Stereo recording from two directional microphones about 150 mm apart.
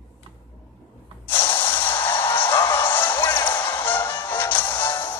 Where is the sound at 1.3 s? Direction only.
35° left (ahead or behind).